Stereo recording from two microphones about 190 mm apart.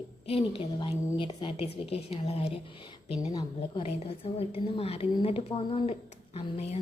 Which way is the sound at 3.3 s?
20° left (ahead or behind).